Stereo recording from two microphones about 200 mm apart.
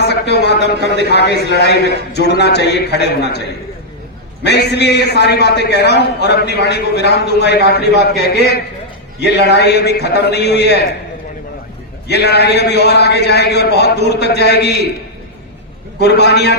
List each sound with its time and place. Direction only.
0.0 s speech: 55° left (ahead or behind)
0.8 s speech: 55° right (ahead or behind)
1.1 s a man's voice: 55° left (ahead or behind)
4.4 s a man's voice: 55° left (ahead or behind)
12.0 s a man's voice: 55° left (ahead or behind)
16.0 s a man's voice: 55° left (ahead or behind)